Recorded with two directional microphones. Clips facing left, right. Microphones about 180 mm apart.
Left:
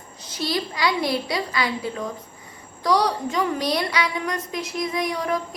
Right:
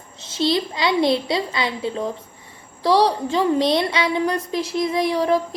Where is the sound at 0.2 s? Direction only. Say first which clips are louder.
Right 6 dB; 25° right (ahead or behind).